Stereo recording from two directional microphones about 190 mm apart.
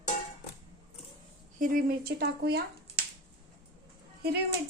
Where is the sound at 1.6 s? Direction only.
45° right (ahead or behind).